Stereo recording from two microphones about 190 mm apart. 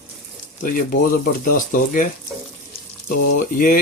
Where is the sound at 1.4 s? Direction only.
45° left (ahead or behind).